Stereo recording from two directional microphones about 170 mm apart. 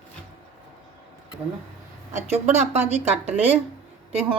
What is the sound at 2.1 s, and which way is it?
A woman's voice, 40° right (ahead or behind).